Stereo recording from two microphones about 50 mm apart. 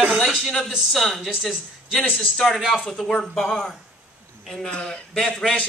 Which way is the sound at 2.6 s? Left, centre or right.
Centre.